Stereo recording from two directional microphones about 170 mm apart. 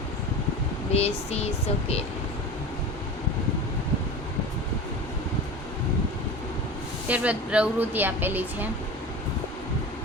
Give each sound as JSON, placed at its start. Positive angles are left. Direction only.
{"t": 0.9, "sound": "speech", "side_deg": 35}
{"t": 7.1, "sound": "speech", "side_deg": -5}